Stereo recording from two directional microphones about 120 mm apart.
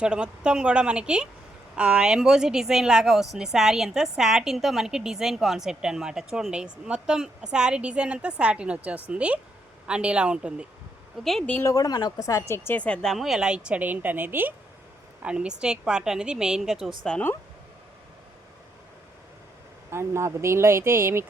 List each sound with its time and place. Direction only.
0.0 s a woman's voice: 10° right (ahead or behind)
11.2 s a woman's voice: 5° left (ahead or behind)
11.5 s a woman's voice: 25° left (ahead or behind); by 17.2 s 5° left (ahead or behind)
19.9 s speech: 20° right (ahead or behind)